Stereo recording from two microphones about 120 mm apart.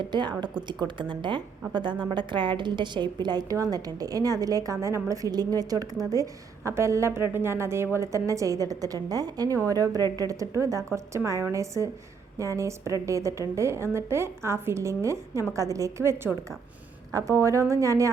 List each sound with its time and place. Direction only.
0.1 s a woman's voice: 40° right (ahead or behind)